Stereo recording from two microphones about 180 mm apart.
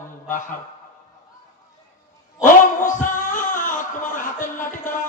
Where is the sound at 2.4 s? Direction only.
45° left (ahead or behind).